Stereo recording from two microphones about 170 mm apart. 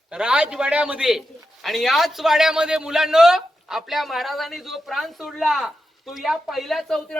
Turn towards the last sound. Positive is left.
turn(degrees=0)  # may be behind; listen again after turning